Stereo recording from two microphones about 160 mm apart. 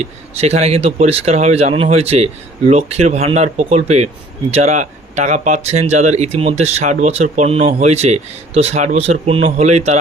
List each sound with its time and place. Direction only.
0.0 s speech: 45° right (ahead or behind)